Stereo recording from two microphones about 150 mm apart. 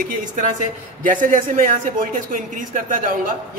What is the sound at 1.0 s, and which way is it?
Speech, 65° right (ahead or behind).